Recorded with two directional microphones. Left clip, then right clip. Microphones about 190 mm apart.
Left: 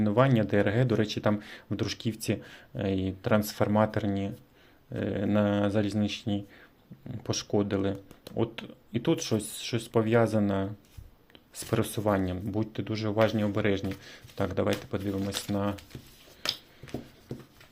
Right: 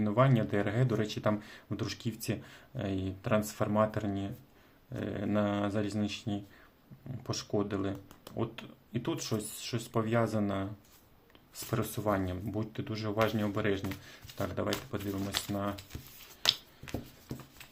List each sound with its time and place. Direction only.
0.0 s speech: 25° left (ahead or behind)